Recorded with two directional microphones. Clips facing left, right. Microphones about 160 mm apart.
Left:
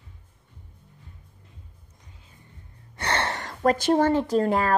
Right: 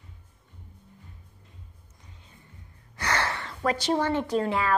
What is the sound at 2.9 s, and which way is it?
Speech, 25° left (ahead or behind).